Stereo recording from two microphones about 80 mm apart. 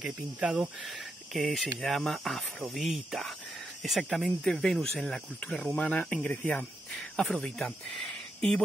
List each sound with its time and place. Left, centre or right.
0.0 s speech: centre